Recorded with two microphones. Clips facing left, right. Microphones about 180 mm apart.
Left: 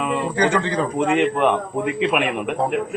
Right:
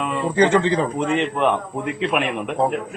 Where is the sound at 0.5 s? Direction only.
20° right (ahead or behind).